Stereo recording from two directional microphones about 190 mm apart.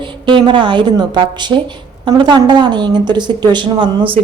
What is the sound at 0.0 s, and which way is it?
Speech, 25° right (ahead or behind).